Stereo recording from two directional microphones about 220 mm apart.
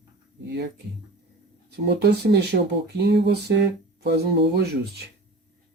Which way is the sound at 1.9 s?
45° right (ahead or behind).